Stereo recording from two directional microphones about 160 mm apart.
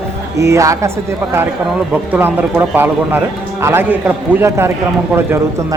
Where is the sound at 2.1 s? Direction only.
10° right (ahead or behind).